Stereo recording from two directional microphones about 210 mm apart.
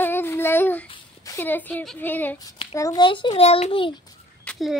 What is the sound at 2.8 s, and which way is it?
A child's voice, 20° left (ahead or behind).